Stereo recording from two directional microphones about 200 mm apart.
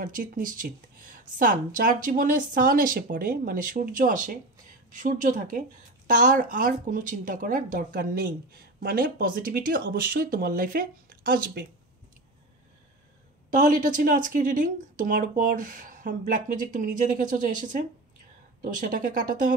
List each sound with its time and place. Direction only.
0.0 s speech: 40° right (ahead or behind)
13.6 s speech: 40° right (ahead or behind)